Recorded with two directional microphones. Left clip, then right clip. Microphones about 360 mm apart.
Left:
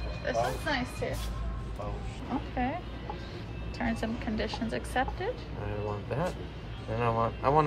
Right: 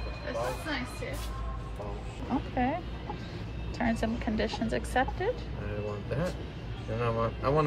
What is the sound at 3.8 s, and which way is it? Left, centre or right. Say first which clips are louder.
A woman's voice: right 3 dB; centre.